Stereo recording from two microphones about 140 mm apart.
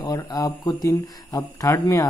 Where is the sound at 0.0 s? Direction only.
25° left (ahead or behind).